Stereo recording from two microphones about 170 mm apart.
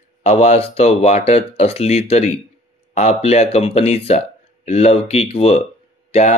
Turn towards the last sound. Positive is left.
turn(degrees=40)  # may be behind; listen again after turning